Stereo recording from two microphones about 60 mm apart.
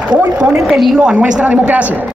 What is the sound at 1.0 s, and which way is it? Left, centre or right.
Speech, centre.